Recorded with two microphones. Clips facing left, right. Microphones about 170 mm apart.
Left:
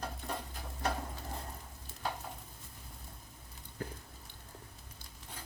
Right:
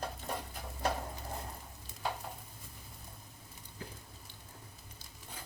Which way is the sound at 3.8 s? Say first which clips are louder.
Left 6 dB; 50° left (ahead or behind).